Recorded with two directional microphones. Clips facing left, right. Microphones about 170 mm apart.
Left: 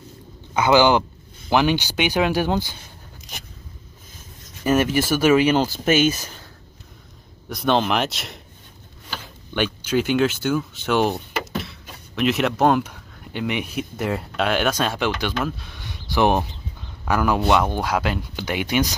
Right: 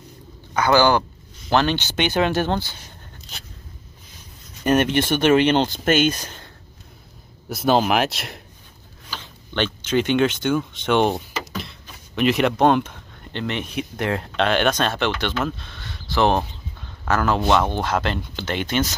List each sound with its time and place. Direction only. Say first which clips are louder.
0.6 s speech: left 1 dB; 15° left (ahead or behind)
4.6 s speech: right 1 dB; 5° left (ahead or behind)
9.5 s speech: even; 10° left (ahead or behind)
12.2 s speech: right 1 dB; centre (ahead or behind)